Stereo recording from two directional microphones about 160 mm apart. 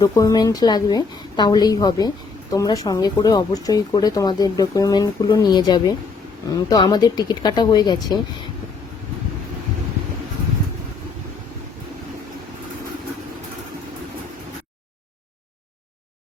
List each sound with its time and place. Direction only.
0.0 s a woman's voice: 20° left (ahead or behind)